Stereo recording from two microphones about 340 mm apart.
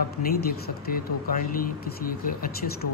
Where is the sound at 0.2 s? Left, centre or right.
Left.